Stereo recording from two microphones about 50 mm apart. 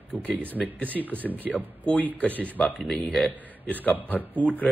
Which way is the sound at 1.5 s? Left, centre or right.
Left.